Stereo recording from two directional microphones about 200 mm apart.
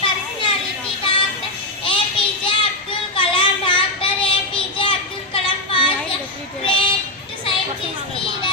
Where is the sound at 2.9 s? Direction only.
25° left (ahead or behind).